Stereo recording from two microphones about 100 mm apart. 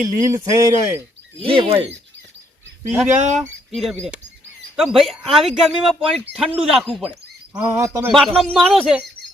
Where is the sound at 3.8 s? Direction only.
5° right (ahead or behind).